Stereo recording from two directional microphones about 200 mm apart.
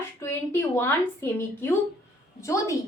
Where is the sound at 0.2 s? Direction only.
10° left (ahead or behind).